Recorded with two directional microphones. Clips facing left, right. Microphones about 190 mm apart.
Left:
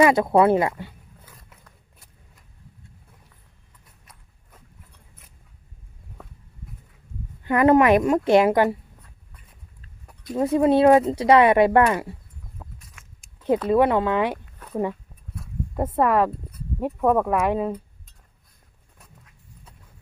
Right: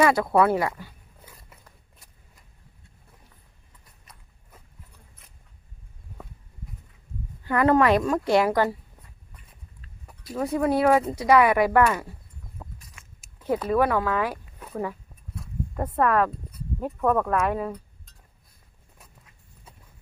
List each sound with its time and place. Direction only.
0.0 s speech: 20° left (ahead or behind)
1.2 s wild animals: 5° right (ahead or behind)
4.0 s walk: centre (ahead or behind)
7.4 s speech: 20° left (ahead or behind)
10.3 s speech: 25° left (ahead or behind)
12.5 s a sound: centre (ahead or behind)
13.7 s speech: 25° left (ahead or behind)
18.9 s horse: 5° right (ahead or behind)